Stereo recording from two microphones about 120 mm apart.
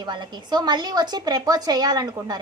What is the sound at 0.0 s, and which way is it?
A woman's voice, 40° right (ahead or behind).